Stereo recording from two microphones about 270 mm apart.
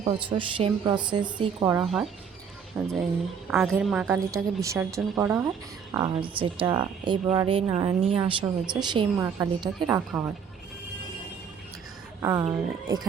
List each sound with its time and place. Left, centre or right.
0.0 s a woman's voice: centre
1.8 s a woman's voice: centre
12.2 s a woman's voice: centre